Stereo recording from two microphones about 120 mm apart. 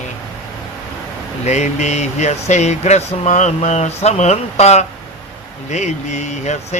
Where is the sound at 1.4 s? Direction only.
70° left (ahead or behind).